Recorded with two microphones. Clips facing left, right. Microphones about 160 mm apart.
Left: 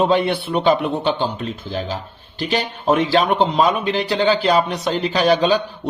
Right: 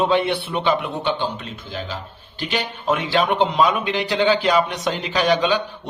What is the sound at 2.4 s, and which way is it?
Speech, 35° left (ahead or behind).